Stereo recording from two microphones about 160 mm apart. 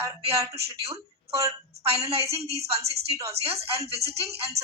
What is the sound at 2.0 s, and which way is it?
A woman's voice, 40° right (ahead or behind).